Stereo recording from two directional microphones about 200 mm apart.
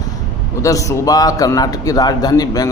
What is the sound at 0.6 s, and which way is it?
A man's voice, 15° left (ahead or behind).